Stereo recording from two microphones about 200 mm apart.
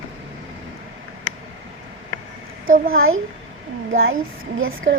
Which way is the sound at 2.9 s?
90° right.